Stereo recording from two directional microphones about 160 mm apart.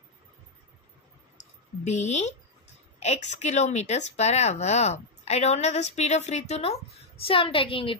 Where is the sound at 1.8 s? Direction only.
45° left (ahead or behind).